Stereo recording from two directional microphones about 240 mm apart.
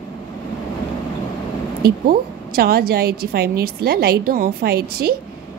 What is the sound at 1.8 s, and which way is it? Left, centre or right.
A woman's voice, right.